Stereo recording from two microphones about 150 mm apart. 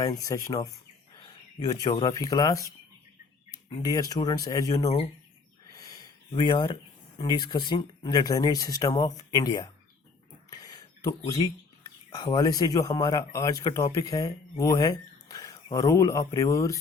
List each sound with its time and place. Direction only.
0.0 s speech: 25° left (ahead or behind)
3.8 s speech: 25° left (ahead or behind)
5.7 s a sound: 25° left (ahead or behind)
7.2 s speech: 30° left (ahead or behind)
10.5 s a sound: 25° left (ahead or behind)
11.3 s speech: 25° left (ahead or behind)